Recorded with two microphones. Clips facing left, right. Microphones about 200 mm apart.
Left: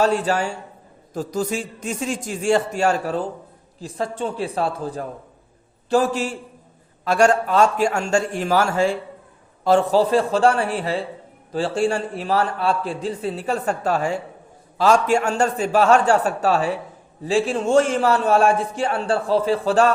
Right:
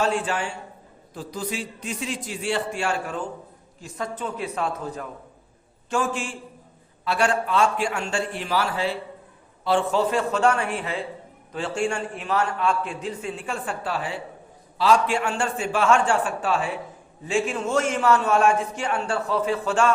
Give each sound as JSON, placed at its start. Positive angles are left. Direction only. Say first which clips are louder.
{"t": 0.0, "sound": "a man's voice", "louder": "left 5 dB", "side_deg": 40}